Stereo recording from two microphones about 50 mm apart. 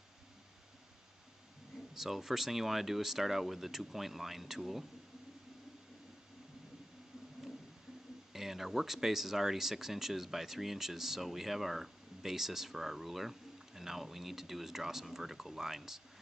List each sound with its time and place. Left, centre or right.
2.0 s speech: centre
8.3 s speech: centre